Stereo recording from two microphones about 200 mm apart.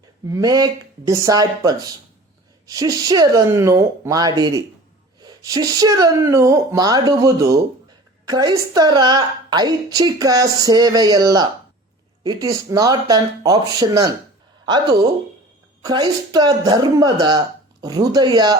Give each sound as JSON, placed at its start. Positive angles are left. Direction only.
{"t": 0.3, "sound": "a woman's voice", "side_deg": -15}